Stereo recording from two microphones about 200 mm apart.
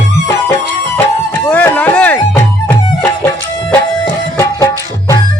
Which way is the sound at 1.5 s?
10° left (ahead or behind).